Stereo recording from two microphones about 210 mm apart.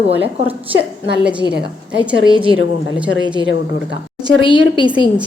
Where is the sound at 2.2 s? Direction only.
25° right (ahead or behind).